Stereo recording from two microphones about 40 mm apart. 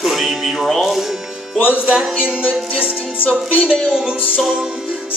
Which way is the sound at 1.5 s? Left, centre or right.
Left.